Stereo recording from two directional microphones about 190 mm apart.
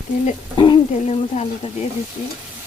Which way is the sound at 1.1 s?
35° left (ahead or behind).